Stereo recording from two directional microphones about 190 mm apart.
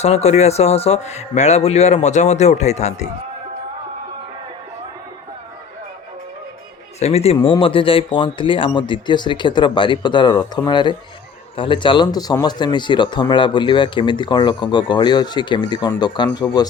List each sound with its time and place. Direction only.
0.0 s speech: 35° left (ahead or behind)
7.0 s speech: 35° left (ahead or behind)